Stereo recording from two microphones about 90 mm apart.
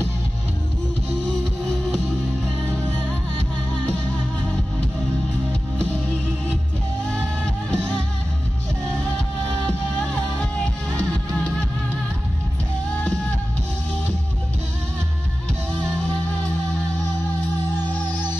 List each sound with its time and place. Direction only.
7.4 s music: 10° left (ahead or behind)